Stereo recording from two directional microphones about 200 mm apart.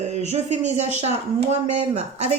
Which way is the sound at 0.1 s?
35° right (ahead or behind).